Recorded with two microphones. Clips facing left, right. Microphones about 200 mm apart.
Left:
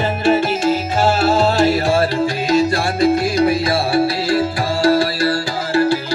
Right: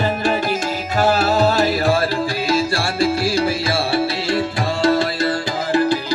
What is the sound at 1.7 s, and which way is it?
Music, 40° left (ahead or behind).